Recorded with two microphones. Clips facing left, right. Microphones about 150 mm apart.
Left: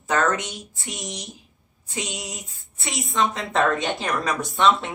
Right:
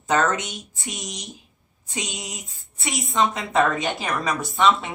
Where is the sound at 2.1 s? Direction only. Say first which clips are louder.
Left 1 dB; 20° right (ahead or behind).